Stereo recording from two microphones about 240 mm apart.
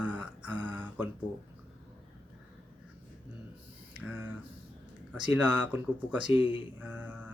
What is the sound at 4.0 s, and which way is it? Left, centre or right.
Speech, centre.